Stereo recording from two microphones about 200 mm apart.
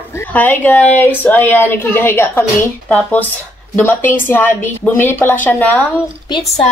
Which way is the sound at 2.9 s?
5° left (ahead or behind).